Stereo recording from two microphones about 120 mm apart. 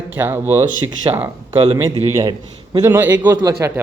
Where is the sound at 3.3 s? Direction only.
30° right (ahead or behind).